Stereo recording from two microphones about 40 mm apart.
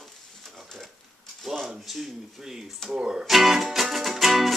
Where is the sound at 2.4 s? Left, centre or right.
Centre.